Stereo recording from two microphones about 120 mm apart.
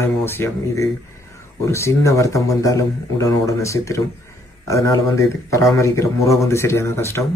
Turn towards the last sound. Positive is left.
turn(degrees=20)  # may be behind; listen again after turning